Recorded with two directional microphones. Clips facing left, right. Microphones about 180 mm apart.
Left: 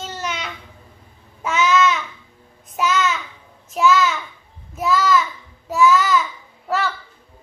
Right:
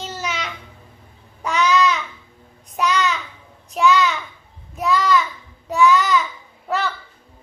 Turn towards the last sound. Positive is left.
turn(degrees=0)  # may be behind; listen again after turning